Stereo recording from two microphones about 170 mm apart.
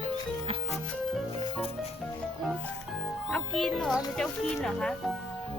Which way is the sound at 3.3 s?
5° left (ahead or behind).